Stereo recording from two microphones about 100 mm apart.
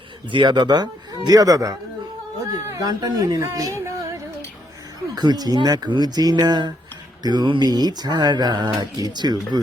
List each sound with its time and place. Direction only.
0.3 s speech: 50° right (ahead or behind); by 3.8 s 35° right (ahead or behind)
5.1 s speech: 45° right (ahead or behind)